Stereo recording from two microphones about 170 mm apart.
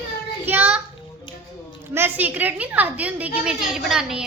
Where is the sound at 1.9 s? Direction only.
10° right (ahead or behind).